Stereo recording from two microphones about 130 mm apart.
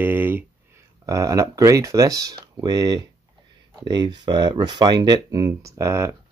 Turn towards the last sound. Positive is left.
turn(degrees=-20)  # may be behind; listen again after turning